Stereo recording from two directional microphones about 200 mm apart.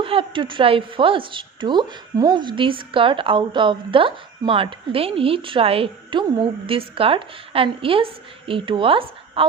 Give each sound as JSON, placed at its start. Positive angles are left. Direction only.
{"t": 0.0, "sound": "a woman's voice", "side_deg": -25}